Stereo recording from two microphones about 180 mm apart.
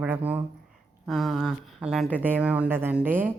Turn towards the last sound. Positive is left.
turn(degrees=-10)  # may be behind; listen again after turning